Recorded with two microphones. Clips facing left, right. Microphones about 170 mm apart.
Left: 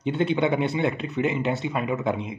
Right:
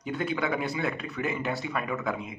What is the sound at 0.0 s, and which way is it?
Speech, 25° left (ahead or behind).